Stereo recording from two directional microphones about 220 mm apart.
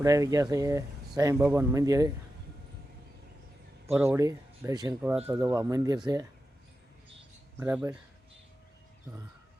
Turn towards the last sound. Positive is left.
turn(degrees=-10)  # may be behind; listen again after turning